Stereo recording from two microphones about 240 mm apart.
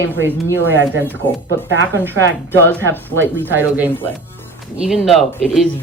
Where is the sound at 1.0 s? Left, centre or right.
Centre.